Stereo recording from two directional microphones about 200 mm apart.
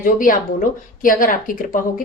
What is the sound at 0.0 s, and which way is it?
A woman's voice, 45° left (ahead or behind).